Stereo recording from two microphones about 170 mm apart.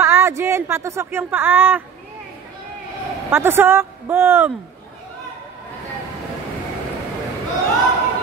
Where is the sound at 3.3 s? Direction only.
15° right (ahead or behind).